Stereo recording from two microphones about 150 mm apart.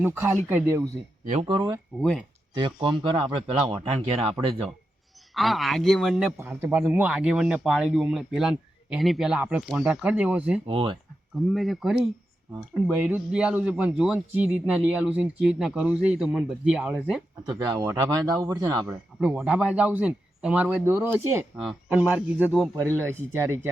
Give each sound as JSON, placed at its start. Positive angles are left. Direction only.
{"t": 0.0, "sound": "speech", "side_deg": -15}
{"t": 1.2, "sound": "speech", "side_deg": -55}
{"t": 1.5, "sound": "speech", "side_deg": -30}
{"t": 2.0, "sound": "speech", "side_deg": 0}
{"t": 2.6, "sound": "speech", "side_deg": -30}
{"t": 5.3, "sound": "speech", "side_deg": 0}
{"t": 6.4, "sound": "speech", "side_deg": -15}
{"t": 10.7, "sound": "speech", "side_deg": -35}
{"t": 11.3, "sound": "speech", "side_deg": 0}
{"t": 17.6, "sound": "speech", "side_deg": -25}
{"t": 19.2, "sound": "speech", "side_deg": -5}
{"t": 21.6, "sound": "speech", "side_deg": 0}